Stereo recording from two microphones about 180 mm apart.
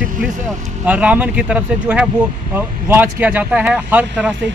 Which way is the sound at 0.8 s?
5° right (ahead or behind).